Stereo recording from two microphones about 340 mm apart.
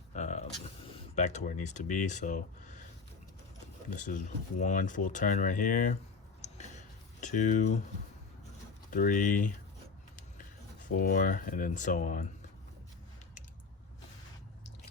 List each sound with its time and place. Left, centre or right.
0.1 s a sound: left
1.1 s speech: left
3.8 s speech: left
7.2 s speech: left
8.9 s speech: left
10.8 s speech: left